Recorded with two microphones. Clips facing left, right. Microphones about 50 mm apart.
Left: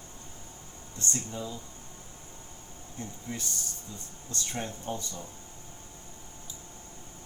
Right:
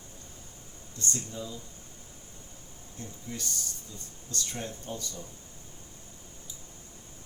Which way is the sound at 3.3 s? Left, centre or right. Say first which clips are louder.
Right 1 dB; left.